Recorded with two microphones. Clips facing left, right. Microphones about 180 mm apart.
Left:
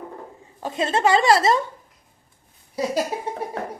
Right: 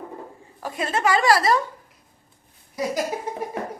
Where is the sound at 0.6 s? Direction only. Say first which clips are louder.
Left 3 dB; 25° left (ahead or behind).